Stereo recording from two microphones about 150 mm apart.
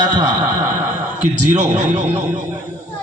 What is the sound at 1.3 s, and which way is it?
Speech, 55° right (ahead or behind).